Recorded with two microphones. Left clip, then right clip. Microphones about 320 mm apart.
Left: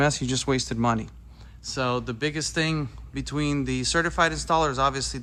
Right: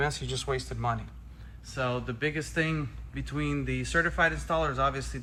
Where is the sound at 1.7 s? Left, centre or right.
Centre.